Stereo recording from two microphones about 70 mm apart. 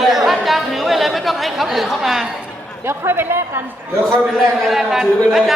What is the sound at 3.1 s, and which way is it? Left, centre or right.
Speech, right.